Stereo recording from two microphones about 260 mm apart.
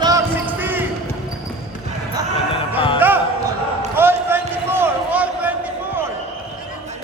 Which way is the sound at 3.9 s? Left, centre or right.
Centre.